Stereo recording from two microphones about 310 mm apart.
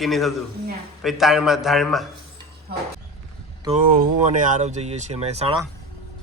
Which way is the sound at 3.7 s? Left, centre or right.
Right.